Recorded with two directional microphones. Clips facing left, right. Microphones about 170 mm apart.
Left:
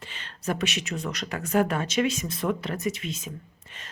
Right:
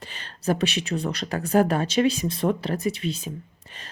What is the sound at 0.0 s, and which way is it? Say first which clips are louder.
A woman's voice: right 5 dB; 40° right (ahead or behind).